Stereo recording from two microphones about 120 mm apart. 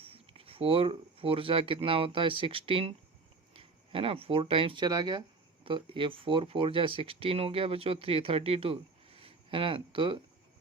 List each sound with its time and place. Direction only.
0.0 s speech: 50° right (ahead or behind)
4.9 s speech: 35° right (ahead or behind)
5.6 s speech: 45° right (ahead or behind)